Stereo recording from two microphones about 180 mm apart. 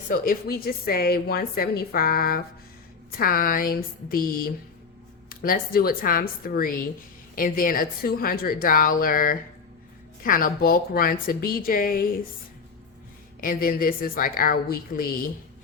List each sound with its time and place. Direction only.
0.1 s a woman's voice: 55° left (ahead or behind)
13.4 s a woman's voice: 55° left (ahead or behind)